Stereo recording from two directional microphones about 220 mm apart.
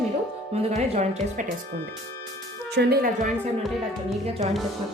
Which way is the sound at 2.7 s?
45° right (ahead or behind).